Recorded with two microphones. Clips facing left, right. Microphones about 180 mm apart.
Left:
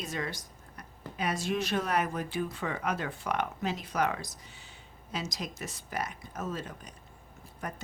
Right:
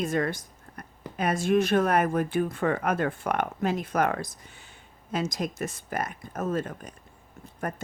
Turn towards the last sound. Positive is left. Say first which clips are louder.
# right 6 dB
turn(degrees=-50)  # may be behind; listen again after turning